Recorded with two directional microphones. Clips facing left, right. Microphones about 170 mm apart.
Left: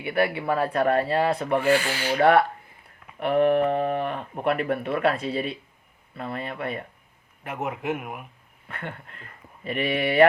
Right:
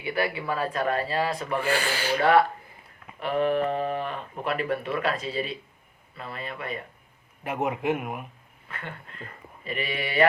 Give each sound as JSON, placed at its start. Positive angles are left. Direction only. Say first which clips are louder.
{"t": 0.0, "sound": "speech", "louder": "left 4 dB", "side_deg": 60}
{"t": 1.6, "sound": "rub", "louder": "left 4 dB", "side_deg": -35}
{"t": 2.1, "sound": "speech", "louder": "left 2 dB", "side_deg": 60}
{"t": 7.4, "sound": "speech", "louder": "right 2 dB", "side_deg": 0}
{"t": 8.6, "sound": "speech", "louder": "left 3 dB", "side_deg": 55}